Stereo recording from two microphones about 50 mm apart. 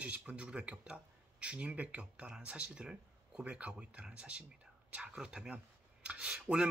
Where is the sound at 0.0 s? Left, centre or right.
Right.